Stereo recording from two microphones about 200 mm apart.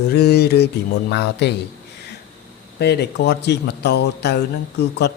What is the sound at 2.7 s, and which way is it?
Speech, 55° left (ahead or behind).